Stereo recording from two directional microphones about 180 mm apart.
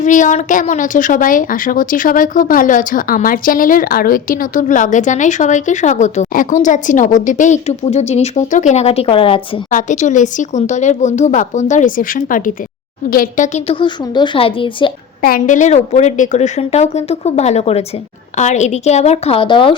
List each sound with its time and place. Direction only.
0.0 s a woman's voice: 45° left (ahead or behind)
9.6 s a woman's voice: 45° left (ahead or behind)
13.7 s a woman's voice: 25° left (ahead or behind)
15.2 s a woman's voice: 50° left (ahead or behind); by 19.7 s 25° left (ahead or behind)